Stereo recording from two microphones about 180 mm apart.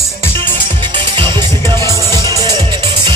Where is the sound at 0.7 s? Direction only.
30° right (ahead or behind).